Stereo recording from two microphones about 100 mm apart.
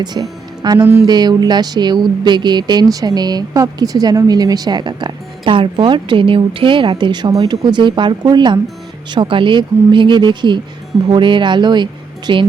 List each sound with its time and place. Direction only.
0.0 s speech: 45° right (ahead or behind)